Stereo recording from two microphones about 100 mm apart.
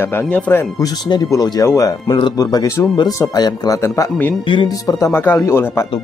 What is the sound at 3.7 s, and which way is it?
Speech, 25° left (ahead or behind).